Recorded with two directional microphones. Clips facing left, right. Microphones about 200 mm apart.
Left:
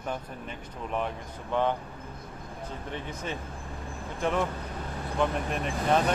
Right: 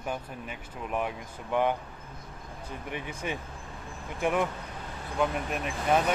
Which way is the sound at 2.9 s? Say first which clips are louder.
Right 2 dB; 10° right (ahead or behind).